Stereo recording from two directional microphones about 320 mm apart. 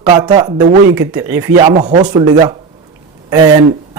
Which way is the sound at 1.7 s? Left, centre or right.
Right.